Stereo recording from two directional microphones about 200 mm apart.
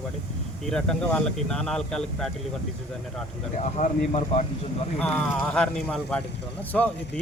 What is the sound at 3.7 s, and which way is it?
Speech, 35° left (ahead or behind).